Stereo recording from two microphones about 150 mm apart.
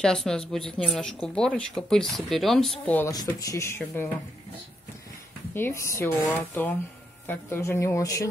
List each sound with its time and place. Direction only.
0.0 s speech: 5° left (ahead or behind)
3.1 s a woman's voice: 25° left (ahead or behind)
5.5 s a woman's voice: 15° left (ahead or behind)